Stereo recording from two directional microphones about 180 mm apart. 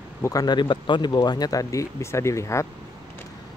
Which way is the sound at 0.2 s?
20° left (ahead or behind).